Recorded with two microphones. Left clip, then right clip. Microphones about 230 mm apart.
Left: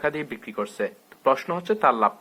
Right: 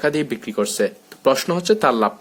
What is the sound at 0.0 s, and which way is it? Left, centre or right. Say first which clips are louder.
Speech: right 6 dB; right.